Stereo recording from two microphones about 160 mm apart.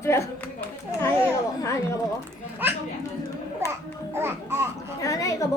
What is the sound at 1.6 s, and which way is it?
Speech, 20° left (ahead or behind).